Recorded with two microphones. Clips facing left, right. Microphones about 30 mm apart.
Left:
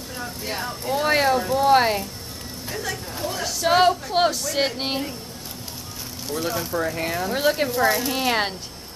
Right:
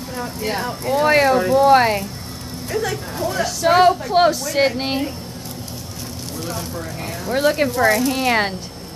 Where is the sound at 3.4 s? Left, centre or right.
Centre.